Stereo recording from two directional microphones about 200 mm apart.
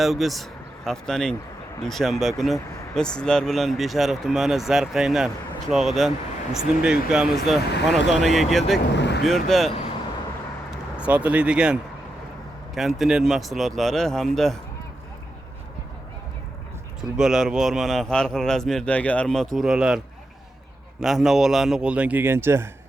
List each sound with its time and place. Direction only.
0.0 s speech: centre (ahead or behind)
9.0 s vehicle: 60° left (ahead or behind)
9.2 s speech: centre (ahead or behind)
11.0 s speech: 5° right (ahead or behind)
13.0 s speech: 5° right (ahead or behind)
17.0 s speech: 5° right (ahead or behind)
21.0 s speech: centre (ahead or behind)